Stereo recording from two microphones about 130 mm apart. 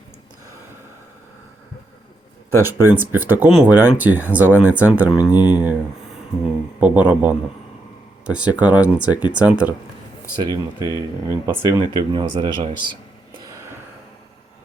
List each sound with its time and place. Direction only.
2.6 s speech: 15° right (ahead or behind)
10.3 s speech: 30° right (ahead or behind)
12.1 s speech: 40° right (ahead or behind)